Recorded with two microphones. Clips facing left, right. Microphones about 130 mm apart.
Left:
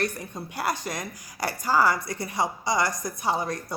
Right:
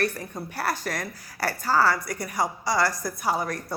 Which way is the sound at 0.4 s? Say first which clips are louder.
Even; 15° left (ahead or behind).